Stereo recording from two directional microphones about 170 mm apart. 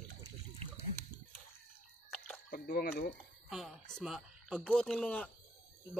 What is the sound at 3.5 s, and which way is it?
Speech, centre (ahead or behind).